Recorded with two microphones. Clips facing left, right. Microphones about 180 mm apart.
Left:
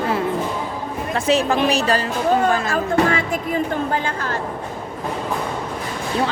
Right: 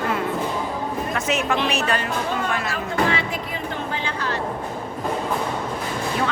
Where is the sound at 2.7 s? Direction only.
50° left (ahead or behind).